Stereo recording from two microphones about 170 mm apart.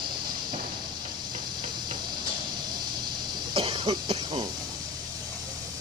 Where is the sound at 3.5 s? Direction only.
30° right (ahead or behind).